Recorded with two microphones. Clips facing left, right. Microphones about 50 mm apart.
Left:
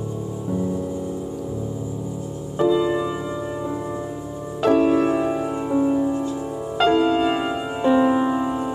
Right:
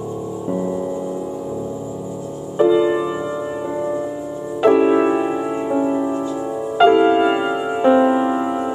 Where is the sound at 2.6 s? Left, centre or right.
Right.